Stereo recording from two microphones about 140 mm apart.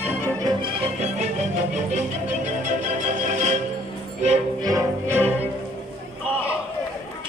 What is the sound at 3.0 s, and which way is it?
Music, 60° right (ahead or behind).